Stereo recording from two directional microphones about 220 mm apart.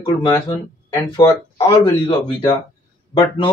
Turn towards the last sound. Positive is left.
turn(degrees=20)  # may be behind; listen again after turning